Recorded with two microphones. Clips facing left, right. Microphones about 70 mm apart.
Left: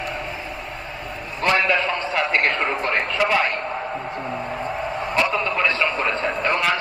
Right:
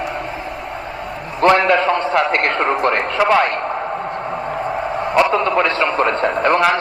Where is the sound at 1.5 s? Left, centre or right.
Right.